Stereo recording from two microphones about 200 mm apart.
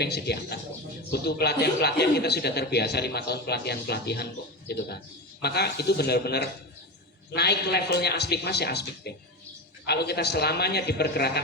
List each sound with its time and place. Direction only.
0.0 s a man's voice: 55° left (ahead or behind)
5.4 s a man's voice: 55° left (ahead or behind)